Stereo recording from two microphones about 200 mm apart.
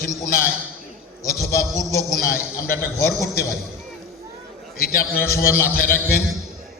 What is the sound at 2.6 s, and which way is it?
Speech, 50° left (ahead or behind).